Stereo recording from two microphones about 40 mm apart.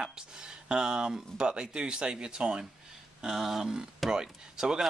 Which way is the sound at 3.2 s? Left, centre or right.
Centre.